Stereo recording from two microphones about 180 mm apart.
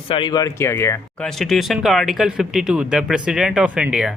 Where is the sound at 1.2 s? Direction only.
Centre (ahead or behind).